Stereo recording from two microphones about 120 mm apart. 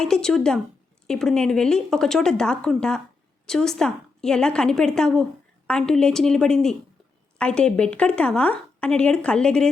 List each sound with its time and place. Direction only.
0.0 s a woman's voice: 5° left (ahead or behind)